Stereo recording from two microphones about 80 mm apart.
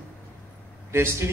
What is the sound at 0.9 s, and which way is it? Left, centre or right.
Speech, right.